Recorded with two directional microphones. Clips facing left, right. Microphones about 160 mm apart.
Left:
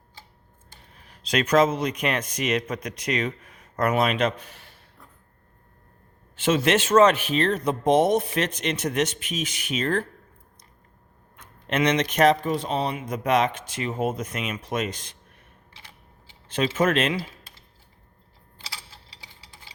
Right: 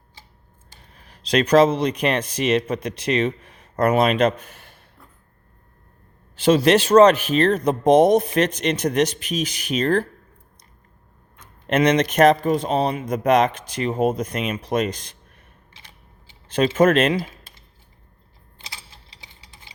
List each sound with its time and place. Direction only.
1.0 s speech: 35° right (ahead or behind)
6.3 s speech: 35° right (ahead or behind)
11.7 s speech: 40° right (ahead or behind)
15.7 s typing: 20° right (ahead or behind)
16.5 s speech: 40° right (ahead or behind)
18.6 s tick-tock: 20° right (ahead or behind)